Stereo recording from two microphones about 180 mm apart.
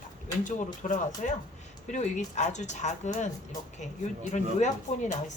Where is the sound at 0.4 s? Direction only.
45° left (ahead or behind).